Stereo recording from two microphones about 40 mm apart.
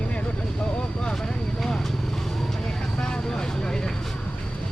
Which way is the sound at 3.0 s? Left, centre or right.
Centre.